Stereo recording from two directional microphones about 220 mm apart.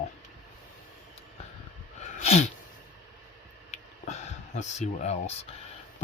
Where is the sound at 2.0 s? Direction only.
30° left (ahead or behind).